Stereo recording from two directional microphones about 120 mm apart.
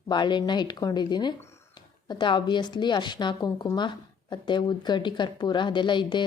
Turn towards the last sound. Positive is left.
turn(degrees=40)  # may be behind; listen again after turning